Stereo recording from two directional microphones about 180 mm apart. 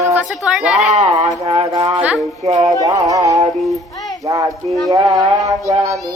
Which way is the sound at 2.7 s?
20° right (ahead or behind).